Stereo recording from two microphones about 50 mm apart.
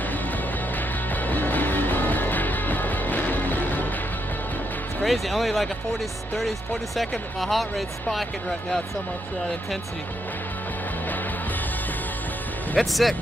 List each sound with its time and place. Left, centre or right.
1.2 s music: left
5.0 s speech: centre
12.7 s speech: centre